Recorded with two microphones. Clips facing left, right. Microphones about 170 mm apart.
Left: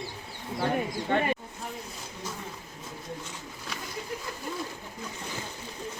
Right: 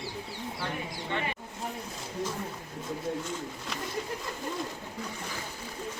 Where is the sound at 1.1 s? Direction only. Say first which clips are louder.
Left 7 dB; 50° left (ahead or behind).